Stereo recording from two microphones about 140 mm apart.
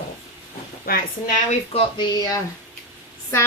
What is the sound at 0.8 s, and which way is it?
Speech, 90° left.